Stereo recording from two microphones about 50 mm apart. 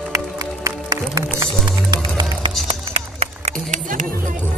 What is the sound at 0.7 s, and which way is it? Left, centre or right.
Music, right.